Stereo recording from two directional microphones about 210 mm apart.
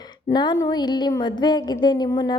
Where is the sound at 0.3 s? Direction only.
15° left (ahead or behind).